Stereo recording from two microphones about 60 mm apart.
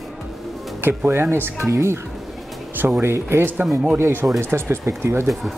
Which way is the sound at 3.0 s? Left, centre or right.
Right.